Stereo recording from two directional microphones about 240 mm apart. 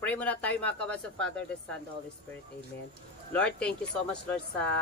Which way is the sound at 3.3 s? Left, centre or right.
Centre.